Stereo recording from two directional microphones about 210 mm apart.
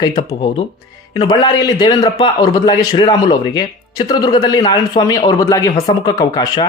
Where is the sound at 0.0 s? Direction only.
20° left (ahead or behind).